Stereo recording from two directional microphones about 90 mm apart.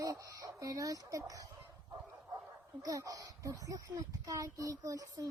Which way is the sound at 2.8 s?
40° right (ahead or behind).